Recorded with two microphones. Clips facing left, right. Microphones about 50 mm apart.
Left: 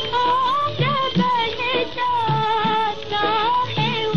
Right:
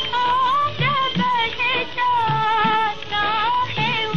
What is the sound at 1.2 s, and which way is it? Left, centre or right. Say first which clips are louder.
Music: left 3 dB; centre.